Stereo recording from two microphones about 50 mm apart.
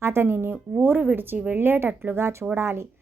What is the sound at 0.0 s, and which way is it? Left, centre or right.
Speech, right.